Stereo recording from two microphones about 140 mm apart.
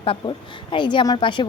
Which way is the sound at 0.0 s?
40° left (ahead or behind).